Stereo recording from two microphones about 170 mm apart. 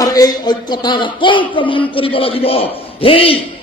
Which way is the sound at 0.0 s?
20° left (ahead or behind).